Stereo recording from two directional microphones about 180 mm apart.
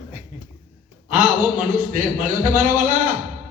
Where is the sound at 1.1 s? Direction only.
50° right (ahead or behind).